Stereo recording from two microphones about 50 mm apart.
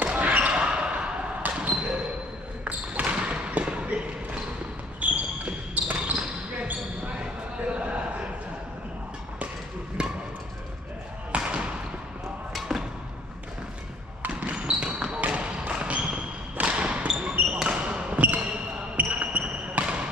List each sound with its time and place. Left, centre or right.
0.0 s basketball bounce: right
3.3 s basketball bounce: right
7.6 s a sound: right
10.0 s a sound: centre
11.3 s basketball bounce: right
12.5 s arrow: centre
14.5 s basketball bounce: centre
15.1 s basketball bounce: right
17.1 s basketball bounce: centre
17.6 s basketball bounce: right